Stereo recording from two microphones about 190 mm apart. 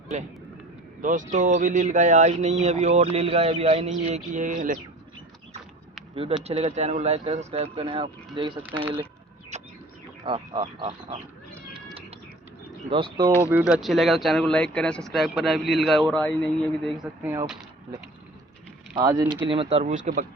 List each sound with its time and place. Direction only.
0.1 s speech: 40° right (ahead or behind)
6.1 s speech: 30° right (ahead or behind)
8.6 s speech: 10° right (ahead or behind)
9.5 s bird: 35° right (ahead or behind)
10.2 s speech: 25° right (ahead or behind)
12.9 s speech: 25° right (ahead or behind)
13.5 s speech: 5° right (ahead or behind)
17.2 s speech: 10° right (ahead or behind)
18.9 s speech: 20° right (ahead or behind); by 20.0 s 35° right (ahead or behind)